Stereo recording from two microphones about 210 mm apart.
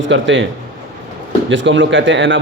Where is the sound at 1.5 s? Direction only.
65° right (ahead or behind).